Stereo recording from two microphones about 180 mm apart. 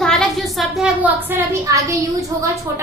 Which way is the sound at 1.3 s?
15° right (ahead or behind).